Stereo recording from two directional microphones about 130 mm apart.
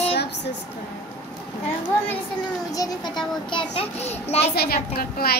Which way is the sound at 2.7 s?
30° left (ahead or behind).